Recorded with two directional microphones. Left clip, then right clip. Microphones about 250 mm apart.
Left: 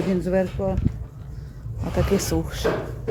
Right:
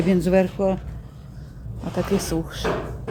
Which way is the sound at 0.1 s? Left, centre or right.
Right.